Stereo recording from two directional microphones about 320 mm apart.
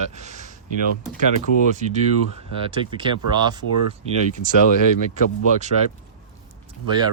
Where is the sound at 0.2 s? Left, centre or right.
Right.